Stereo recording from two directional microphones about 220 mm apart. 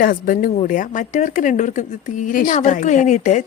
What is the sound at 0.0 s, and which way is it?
Speech, 40° left (ahead or behind).